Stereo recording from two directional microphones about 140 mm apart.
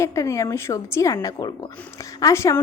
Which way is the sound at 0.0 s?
20° left (ahead or behind).